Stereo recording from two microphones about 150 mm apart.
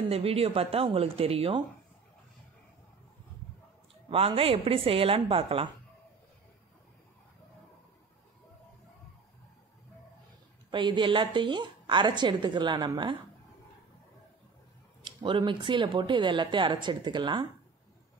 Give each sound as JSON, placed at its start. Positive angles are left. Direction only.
{"t": 0.1, "sound": "a woman's voice", "side_deg": -40}
{"t": 4.1, "sound": "a woman's voice", "side_deg": -40}
{"t": 10.7, "sound": "a woman's voice", "side_deg": -30}
{"t": 15.0, "sound": "a woman's voice", "side_deg": -30}